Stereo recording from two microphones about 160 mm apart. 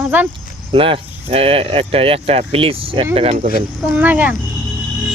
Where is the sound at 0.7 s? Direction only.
35° right (ahead or behind).